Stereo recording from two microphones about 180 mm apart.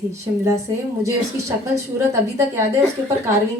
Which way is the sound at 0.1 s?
15° right (ahead or behind).